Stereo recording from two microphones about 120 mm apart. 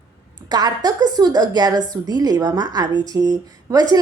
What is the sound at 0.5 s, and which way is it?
A woman's voice, 35° right (ahead or behind).